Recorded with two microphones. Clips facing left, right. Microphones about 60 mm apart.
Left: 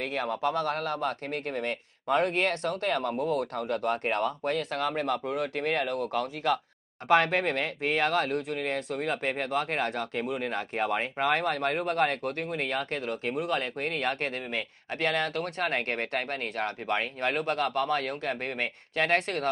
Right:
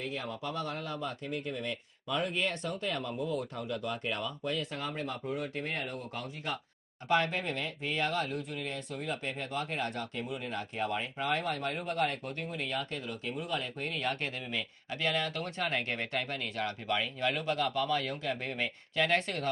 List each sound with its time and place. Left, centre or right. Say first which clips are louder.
0.0 s speech: left 8 dB; left